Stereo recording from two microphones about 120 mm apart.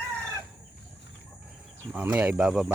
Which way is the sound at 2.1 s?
10° right (ahead or behind).